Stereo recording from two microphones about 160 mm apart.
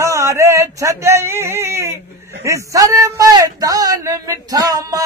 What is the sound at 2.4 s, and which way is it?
A man's voice, 20° right (ahead or behind).